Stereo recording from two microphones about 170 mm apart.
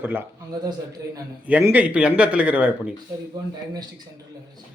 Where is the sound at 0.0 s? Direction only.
10° right (ahead or behind).